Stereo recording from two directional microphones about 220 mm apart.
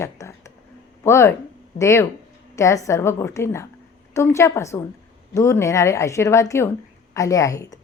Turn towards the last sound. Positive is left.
turn(degrees=15)  # may be behind; listen again after turning